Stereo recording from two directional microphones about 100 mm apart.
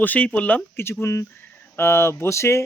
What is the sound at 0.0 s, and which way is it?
Speech, 15° left (ahead or behind).